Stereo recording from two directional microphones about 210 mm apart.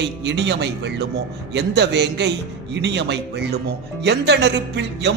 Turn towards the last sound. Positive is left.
turn(degrees=-55)  # may be behind; listen again after turning